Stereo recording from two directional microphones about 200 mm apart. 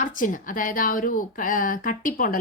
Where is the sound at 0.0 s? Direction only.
40° left (ahead or behind).